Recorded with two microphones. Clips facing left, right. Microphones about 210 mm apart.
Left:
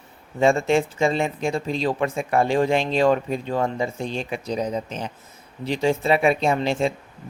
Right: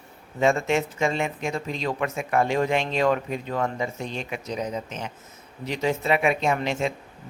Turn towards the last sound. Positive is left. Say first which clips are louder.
# left 3 dB
turn(degrees=30)  # may be behind; listen again after turning